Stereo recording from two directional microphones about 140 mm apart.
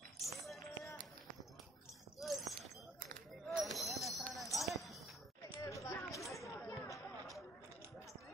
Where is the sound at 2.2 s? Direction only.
Centre (ahead or behind).